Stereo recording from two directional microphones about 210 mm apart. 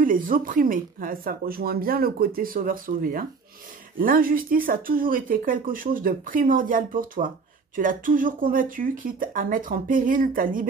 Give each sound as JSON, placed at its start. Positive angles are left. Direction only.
{"t": 0.0, "sound": "speech", "side_deg": -40}